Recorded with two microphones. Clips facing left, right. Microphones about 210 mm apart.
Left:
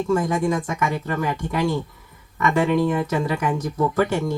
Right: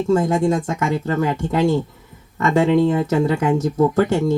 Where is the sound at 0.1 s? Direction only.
25° right (ahead or behind).